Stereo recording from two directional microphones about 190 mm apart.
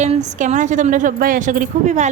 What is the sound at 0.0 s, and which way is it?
A woman's voice, 35° right (ahead or behind).